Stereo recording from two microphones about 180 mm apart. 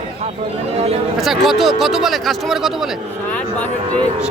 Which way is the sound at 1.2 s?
Centre (ahead or behind).